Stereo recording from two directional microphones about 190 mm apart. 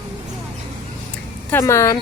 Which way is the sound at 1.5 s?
15° left (ahead or behind).